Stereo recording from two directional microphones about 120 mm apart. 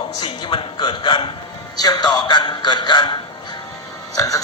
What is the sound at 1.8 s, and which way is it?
A man's voice, 35° left (ahead or behind).